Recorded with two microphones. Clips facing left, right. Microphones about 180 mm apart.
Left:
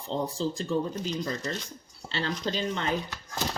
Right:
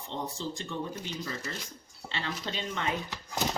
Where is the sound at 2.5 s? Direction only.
35° left (ahead or behind).